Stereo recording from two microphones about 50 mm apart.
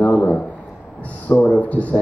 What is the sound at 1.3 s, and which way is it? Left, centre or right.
Speech, left.